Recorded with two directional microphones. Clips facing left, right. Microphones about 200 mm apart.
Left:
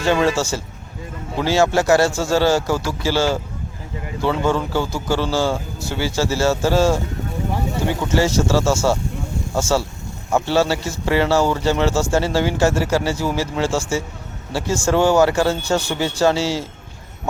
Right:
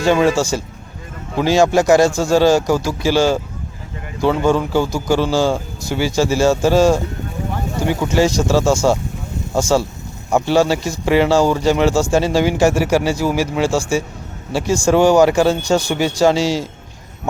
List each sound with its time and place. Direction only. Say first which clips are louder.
0.0 s speech: right 3 dB; 15° right (ahead or behind)